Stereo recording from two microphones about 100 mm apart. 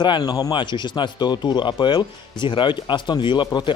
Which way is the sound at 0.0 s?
50° left (ahead or behind).